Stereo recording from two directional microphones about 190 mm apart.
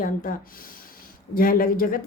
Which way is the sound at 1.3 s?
50° left (ahead or behind).